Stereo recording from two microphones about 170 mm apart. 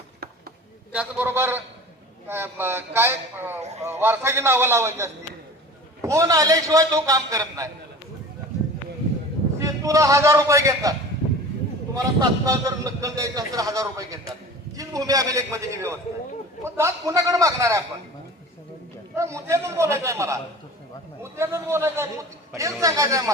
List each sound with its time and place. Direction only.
0.9 s a man's voice: 10° right (ahead or behind)
9.6 s a man's voice: 20° right (ahead or behind)
11.9 s a man's voice: 20° right (ahead or behind)
19.1 s a man's voice: 15° right (ahead or behind)